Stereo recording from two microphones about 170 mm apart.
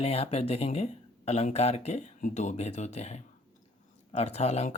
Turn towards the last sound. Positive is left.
turn(degrees=40)  # may be behind; listen again after turning